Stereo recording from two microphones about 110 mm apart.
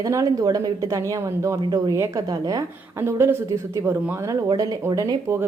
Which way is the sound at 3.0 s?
20° right (ahead or behind).